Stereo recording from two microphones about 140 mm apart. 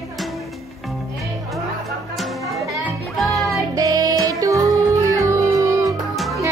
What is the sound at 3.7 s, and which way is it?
Music, 25° right (ahead or behind).